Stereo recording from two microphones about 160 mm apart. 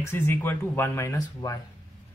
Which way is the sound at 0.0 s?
15° left (ahead or behind).